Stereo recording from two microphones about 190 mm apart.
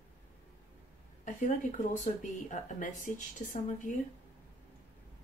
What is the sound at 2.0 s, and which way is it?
A woman's voice, 40° left (ahead or behind).